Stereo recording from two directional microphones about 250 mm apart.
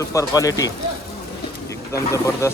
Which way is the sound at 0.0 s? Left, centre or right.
Centre.